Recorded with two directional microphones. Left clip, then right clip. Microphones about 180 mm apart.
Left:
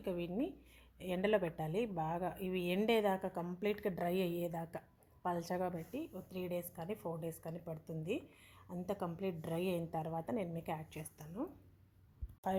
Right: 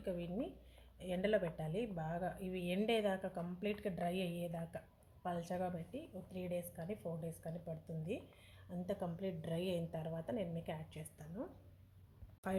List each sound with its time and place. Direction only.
0.0 s a woman's voice: 30° left (ahead or behind)